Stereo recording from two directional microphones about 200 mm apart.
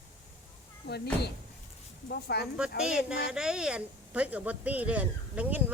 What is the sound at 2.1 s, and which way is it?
Speech, 55° left (ahead or behind).